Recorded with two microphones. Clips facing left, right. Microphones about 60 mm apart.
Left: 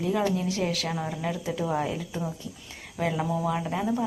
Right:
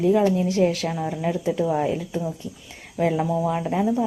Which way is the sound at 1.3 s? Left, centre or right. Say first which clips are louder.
Right 7 dB; right.